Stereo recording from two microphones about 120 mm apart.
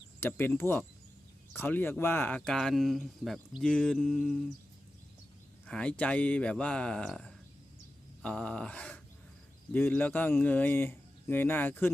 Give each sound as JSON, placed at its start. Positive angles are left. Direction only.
{"t": 0.2, "sound": "speech", "side_deg": 15}
{"t": 3.6, "sound": "a sound", "side_deg": 5}
{"t": 5.6, "sound": "speech", "side_deg": 10}